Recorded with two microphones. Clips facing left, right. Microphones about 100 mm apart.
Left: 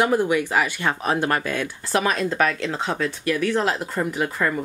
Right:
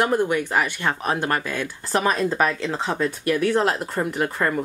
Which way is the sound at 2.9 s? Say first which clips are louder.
Right 1 dB; 30° right (ahead or behind).